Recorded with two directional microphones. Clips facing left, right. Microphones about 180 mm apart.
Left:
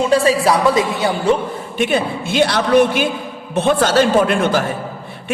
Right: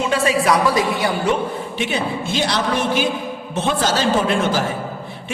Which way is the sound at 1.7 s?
55° left (ahead or behind).